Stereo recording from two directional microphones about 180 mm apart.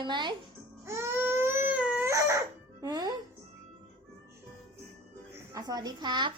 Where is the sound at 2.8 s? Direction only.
20° right (ahead or behind).